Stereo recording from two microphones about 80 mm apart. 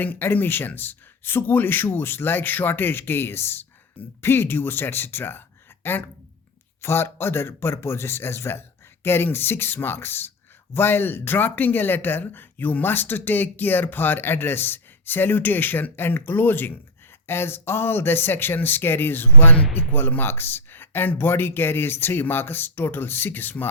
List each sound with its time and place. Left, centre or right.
0.0 s speech: left